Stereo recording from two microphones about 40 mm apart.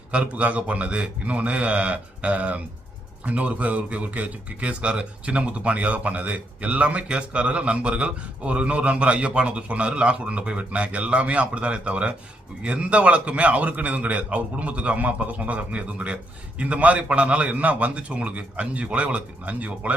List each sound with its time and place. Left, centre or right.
0.1 s speech: right